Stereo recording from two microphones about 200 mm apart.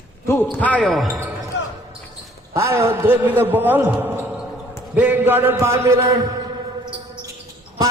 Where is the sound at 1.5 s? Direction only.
65° left (ahead or behind).